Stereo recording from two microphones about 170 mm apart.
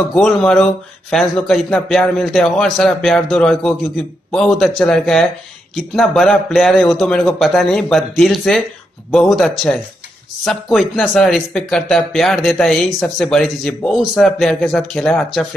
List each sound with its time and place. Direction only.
0.1 s speech: centre (ahead or behind)